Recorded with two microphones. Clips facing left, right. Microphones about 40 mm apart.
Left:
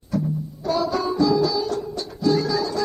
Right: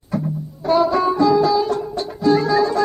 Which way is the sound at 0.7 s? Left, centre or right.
Right.